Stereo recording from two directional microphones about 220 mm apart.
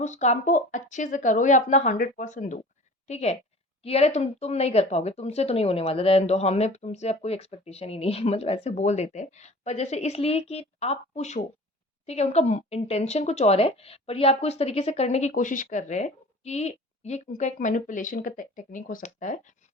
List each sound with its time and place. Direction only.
0.0 s speech: 30° left (ahead or behind)